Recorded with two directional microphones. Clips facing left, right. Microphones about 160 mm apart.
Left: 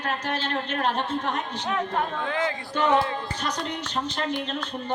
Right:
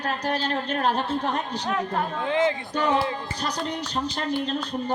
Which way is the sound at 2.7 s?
35° right (ahead or behind).